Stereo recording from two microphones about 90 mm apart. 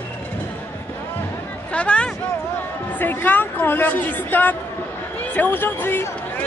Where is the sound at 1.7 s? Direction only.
15° left (ahead or behind).